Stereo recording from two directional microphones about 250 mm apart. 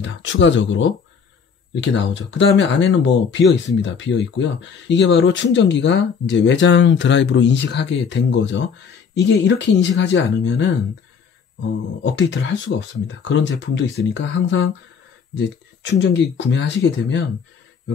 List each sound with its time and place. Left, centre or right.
0.0 s speech: left
12.0 s speech: left